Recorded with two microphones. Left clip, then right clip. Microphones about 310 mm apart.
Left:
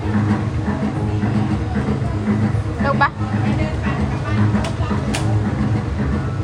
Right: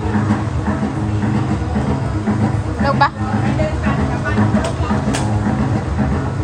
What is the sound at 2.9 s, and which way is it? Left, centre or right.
Vehicle, centre.